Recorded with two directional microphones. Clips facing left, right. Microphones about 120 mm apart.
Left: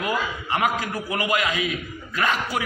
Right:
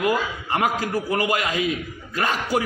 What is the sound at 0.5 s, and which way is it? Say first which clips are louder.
A man's voice: right 2 dB; 35° right (ahead or behind).